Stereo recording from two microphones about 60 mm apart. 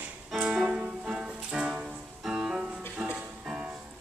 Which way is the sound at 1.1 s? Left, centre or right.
Centre.